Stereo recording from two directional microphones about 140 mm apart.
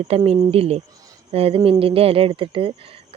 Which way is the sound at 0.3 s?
45° right (ahead or behind).